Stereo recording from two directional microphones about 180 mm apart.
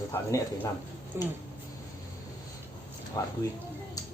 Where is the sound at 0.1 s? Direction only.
15° left (ahead or behind).